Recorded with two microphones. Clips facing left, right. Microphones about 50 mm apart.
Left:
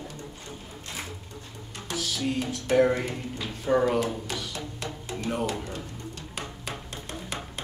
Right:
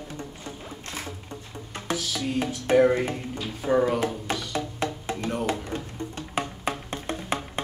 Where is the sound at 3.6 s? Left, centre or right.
Centre.